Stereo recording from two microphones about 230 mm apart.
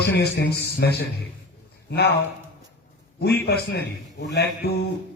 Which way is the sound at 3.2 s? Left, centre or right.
Left.